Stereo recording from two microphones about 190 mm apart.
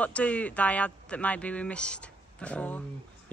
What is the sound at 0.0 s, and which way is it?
Speech, 5° left (ahead or behind).